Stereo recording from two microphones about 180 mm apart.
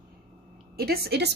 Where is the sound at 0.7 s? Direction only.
60° right (ahead or behind).